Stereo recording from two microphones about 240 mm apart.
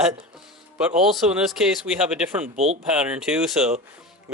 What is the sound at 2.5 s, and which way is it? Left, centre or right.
Speech, right.